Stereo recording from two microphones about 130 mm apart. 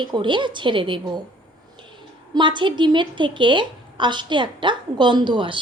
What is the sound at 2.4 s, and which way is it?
A woman's voice, 35° right (ahead or behind).